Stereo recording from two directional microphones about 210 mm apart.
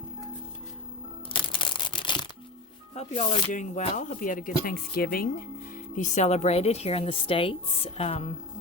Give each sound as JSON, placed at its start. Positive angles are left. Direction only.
{"t": 1.3, "sound": "a sound", "side_deg": 25}
{"t": 2.9, "sound": "speech", "side_deg": 30}
{"t": 6.0, "sound": "speech", "side_deg": 35}